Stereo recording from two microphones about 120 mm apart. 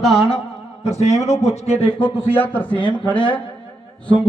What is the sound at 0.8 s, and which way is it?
A man's voice, 65° left (ahead or behind).